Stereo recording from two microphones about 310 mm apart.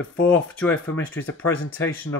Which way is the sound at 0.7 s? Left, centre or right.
Left.